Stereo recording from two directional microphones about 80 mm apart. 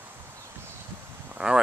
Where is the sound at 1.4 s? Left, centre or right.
Centre.